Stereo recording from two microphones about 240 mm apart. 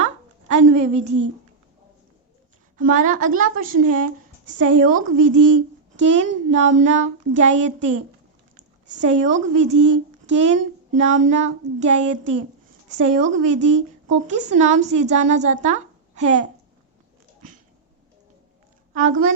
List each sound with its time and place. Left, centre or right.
0.0 s a sound: right
2.7 s a woman's voice: right
18.9 s a woman's voice: right